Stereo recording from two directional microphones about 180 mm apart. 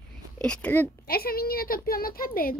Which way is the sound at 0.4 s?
5° left (ahead or behind).